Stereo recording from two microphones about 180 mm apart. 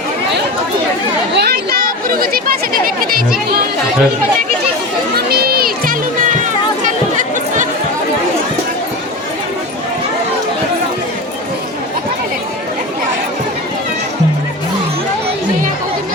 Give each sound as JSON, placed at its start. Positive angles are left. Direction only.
{"t": 1.3, "sound": "speech", "side_deg": -65}
{"t": 5.1, "sound": "music", "side_deg": -60}